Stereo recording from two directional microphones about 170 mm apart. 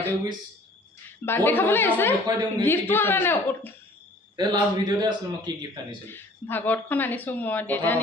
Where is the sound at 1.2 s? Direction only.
15° left (ahead or behind).